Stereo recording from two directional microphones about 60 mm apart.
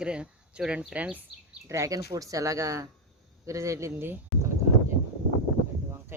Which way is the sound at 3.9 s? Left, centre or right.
Right.